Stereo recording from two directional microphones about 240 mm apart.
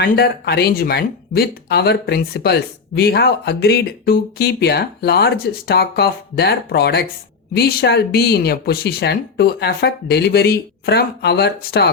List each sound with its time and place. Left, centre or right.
0.0 s speech: left